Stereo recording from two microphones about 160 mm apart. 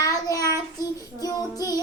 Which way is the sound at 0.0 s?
25° left (ahead or behind).